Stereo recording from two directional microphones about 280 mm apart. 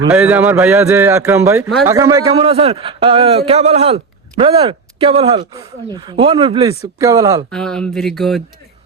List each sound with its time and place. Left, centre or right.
0.1 s a man's voice: centre
7.5 s speech: centre